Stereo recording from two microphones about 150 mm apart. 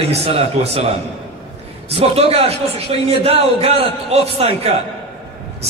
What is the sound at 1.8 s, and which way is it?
A man's voice, 40° right (ahead or behind).